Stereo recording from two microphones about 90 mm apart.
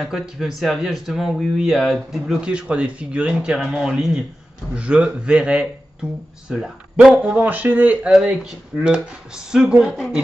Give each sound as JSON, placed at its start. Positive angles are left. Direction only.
{"t": 0.0, "sound": "speech", "side_deg": -5}
{"t": 3.5, "sound": "speech", "side_deg": -5}
{"t": 8.1, "sound": "speech", "side_deg": -5}